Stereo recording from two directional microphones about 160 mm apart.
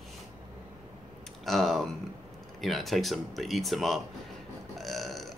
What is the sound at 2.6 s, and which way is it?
Speech, centre (ahead or behind).